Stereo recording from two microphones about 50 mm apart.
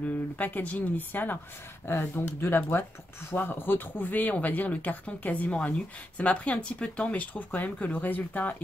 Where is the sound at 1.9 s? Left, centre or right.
Left.